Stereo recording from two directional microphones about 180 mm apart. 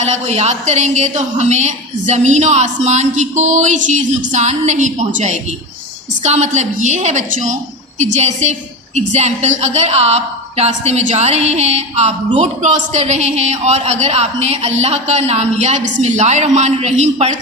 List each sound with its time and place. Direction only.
0.0 s a woman's voice: 40° right (ahead or behind)